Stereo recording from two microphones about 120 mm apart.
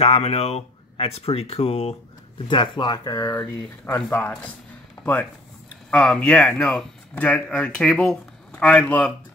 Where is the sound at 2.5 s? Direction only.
40° left (ahead or behind).